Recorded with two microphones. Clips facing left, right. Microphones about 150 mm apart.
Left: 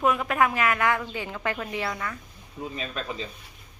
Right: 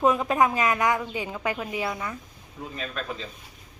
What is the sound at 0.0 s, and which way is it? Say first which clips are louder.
Speech: right 2 dB; 20° right (ahead or behind).